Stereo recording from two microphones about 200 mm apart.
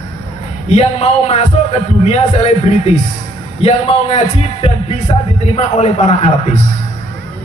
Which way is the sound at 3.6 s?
30° left (ahead or behind).